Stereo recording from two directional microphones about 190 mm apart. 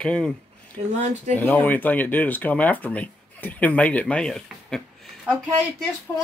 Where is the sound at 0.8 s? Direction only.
35° right (ahead or behind).